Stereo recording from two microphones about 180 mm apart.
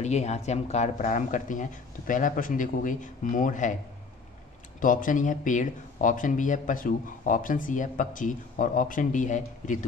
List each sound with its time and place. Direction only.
0.0 s speech: 40° left (ahead or behind)
4.7 s speech: 45° left (ahead or behind)